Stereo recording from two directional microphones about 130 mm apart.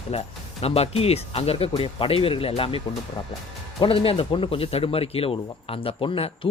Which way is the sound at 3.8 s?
45° left (ahead or behind).